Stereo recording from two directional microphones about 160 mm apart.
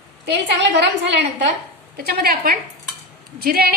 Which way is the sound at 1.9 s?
75° right (ahead or behind).